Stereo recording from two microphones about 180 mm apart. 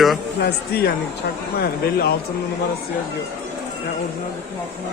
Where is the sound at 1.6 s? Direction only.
60° left (ahead or behind).